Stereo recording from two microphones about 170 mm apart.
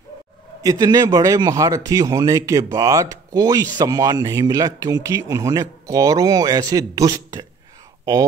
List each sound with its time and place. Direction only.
0.6 s speech: 20° right (ahead or behind)